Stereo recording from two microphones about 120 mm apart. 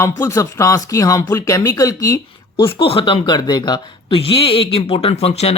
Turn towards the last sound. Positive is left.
turn(degrees=55)  # may be behind; listen again after turning